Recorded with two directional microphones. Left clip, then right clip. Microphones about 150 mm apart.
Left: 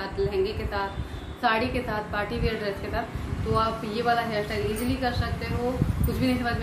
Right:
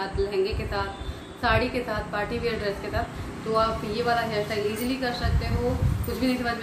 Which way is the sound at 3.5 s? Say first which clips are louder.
Right 2 dB; 5° left (ahead or behind).